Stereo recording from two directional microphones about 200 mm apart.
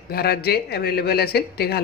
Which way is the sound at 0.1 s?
50° left (ahead or behind).